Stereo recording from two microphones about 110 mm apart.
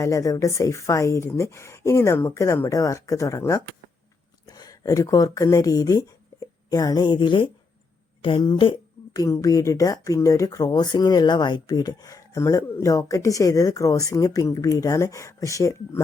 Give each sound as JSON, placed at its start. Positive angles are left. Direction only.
{"t": 0.0, "sound": "a woman's voice", "side_deg": 30}
{"t": 9.1, "sound": "speech", "side_deg": 30}